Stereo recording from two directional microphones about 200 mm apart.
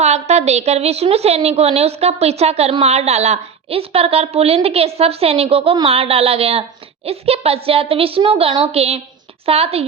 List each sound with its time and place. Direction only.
0.0 s a woman's voice: 35° right (ahead or behind)